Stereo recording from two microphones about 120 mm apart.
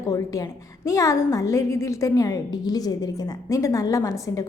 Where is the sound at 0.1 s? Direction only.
30° left (ahead or behind).